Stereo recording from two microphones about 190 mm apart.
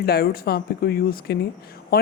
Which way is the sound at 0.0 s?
55° left (ahead or behind).